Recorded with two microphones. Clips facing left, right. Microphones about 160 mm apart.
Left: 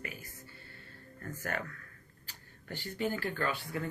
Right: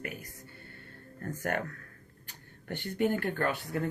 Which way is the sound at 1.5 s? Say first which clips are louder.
Right 5 dB; 50° right (ahead or behind).